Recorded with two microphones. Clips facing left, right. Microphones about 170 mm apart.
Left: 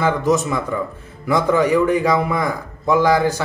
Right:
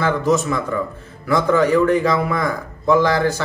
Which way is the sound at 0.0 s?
15° left (ahead or behind).